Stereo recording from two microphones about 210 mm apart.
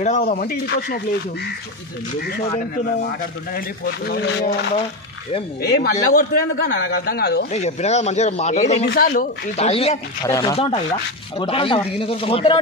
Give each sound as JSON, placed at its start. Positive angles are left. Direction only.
{"t": 0.0, "sound": "a man's voice", "side_deg": 35}
{"t": 3.5, "sound": "a man's voice", "side_deg": 45}
{"t": 7.5, "sound": "speech", "side_deg": 30}
{"t": 8.8, "sound": "speech", "side_deg": 45}
{"t": 10.2, "sound": "speech", "side_deg": 15}
{"t": 10.5, "sound": "speech", "side_deg": 30}